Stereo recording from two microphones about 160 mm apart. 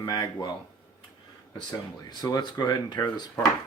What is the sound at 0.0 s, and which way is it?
Speech, 25° left (ahead or behind).